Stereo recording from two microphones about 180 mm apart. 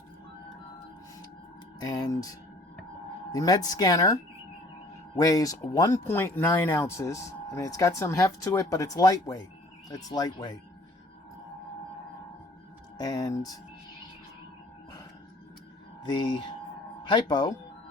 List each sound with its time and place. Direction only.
1.9 s speech: 20° left (ahead or behind)
3.3 s speech: 20° left (ahead or behind)
13.0 s speech: 20° left (ahead or behind)
16.0 s speech: 25° left (ahead or behind)